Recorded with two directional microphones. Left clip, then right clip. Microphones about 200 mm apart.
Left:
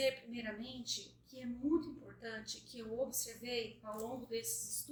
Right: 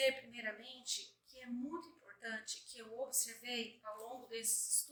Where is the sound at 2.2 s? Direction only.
5° right (ahead or behind).